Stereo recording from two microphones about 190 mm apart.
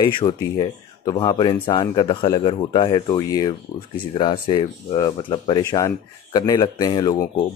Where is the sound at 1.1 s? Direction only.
20° left (ahead or behind).